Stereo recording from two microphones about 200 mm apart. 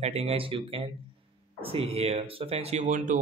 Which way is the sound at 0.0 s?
30° right (ahead or behind).